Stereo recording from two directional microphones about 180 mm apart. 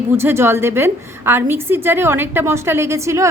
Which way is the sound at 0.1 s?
15° right (ahead or behind).